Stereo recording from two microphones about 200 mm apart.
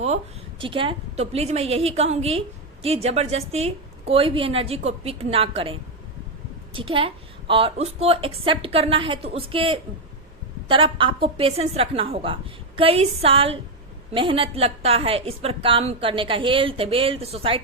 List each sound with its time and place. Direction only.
0.6 s a woman's voice: 25° right (ahead or behind)